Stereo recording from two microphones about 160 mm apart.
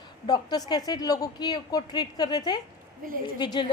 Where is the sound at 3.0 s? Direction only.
60° right (ahead or behind).